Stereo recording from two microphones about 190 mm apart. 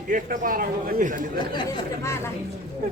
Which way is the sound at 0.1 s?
45° right (ahead or behind).